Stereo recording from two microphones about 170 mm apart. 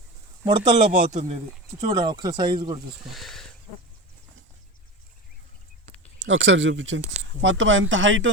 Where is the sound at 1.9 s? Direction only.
25° right (ahead or behind).